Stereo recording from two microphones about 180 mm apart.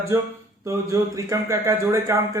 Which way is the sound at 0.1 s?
15° right (ahead or behind).